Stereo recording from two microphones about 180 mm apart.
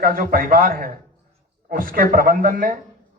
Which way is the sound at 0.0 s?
55° right (ahead or behind).